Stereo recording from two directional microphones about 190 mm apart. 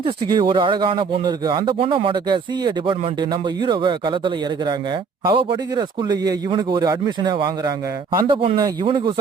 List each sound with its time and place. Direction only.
0.0 s speech: 25° right (ahead or behind)